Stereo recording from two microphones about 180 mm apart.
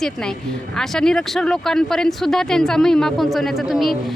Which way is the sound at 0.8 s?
5° left (ahead or behind).